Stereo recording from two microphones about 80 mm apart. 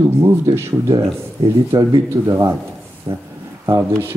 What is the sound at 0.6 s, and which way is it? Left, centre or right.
Speech, right.